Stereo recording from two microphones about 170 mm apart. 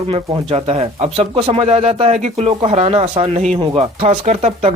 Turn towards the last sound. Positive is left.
turn(degrees=-40)  # may be behind; listen again after turning